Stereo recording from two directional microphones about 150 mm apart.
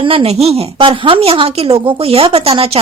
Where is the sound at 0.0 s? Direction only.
35° right (ahead or behind).